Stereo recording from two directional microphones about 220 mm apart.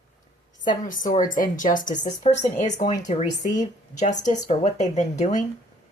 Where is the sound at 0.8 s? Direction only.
35° left (ahead or behind).